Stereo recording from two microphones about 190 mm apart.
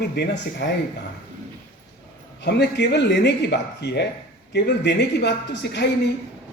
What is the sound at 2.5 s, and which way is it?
A man's voice, 60° left (ahead or behind).